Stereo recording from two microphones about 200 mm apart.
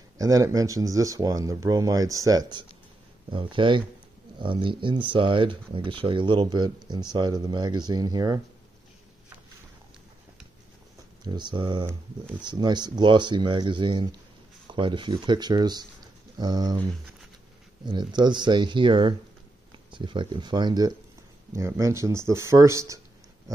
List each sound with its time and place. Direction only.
0.2 s speech: 15° right (ahead or behind)
11.2 s speech: 20° right (ahead or behind)
17.8 s speech: 20° right (ahead or behind)